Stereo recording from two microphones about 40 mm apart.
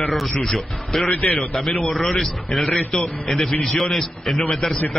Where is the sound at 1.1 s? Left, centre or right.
Left.